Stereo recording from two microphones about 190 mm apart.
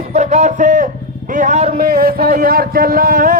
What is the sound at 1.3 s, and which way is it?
A man's voice, 40° right (ahead or behind).